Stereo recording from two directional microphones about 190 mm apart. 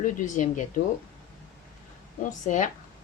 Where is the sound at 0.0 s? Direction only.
40° left (ahead or behind).